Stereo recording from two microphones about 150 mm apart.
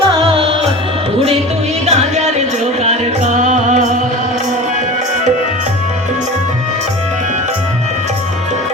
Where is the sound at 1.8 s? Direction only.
45° right (ahead or behind).